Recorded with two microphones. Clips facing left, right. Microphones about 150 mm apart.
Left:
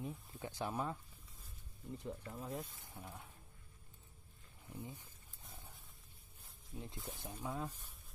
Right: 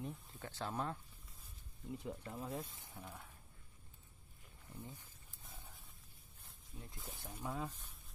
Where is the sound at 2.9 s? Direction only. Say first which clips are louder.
Even; 10° left (ahead or behind).